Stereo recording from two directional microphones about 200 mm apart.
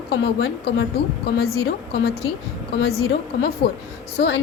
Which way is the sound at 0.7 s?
50° left (ahead or behind).